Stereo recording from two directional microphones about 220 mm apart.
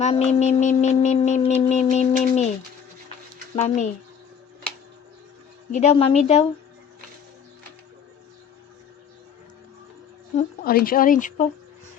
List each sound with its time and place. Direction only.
0.0 s speech: 30° left (ahead or behind)
3.5 s a woman's voice: 30° left (ahead or behind)
5.7 s a woman's voice: 30° left (ahead or behind)
10.3 s speech: 40° left (ahead or behind)